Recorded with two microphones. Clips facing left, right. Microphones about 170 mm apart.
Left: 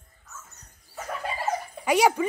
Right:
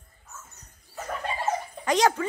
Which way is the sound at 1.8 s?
10° left (ahead or behind).